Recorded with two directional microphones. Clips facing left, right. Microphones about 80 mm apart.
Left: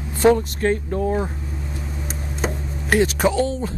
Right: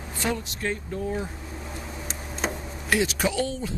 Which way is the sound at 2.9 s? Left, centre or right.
Left.